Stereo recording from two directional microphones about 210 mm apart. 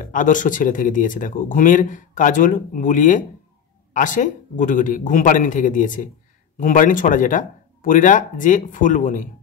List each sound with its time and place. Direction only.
0.0 s speech: 40° left (ahead or behind)